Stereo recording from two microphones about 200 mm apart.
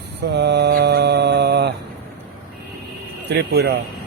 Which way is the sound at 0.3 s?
55° right (ahead or behind).